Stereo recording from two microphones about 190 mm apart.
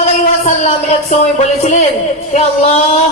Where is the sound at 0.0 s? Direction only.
35° left (ahead or behind).